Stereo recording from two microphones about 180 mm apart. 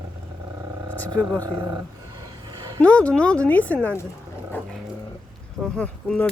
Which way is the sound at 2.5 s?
25° right (ahead or behind).